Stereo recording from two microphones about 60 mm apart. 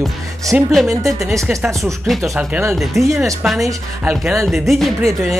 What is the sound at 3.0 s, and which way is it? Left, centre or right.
Speech, right.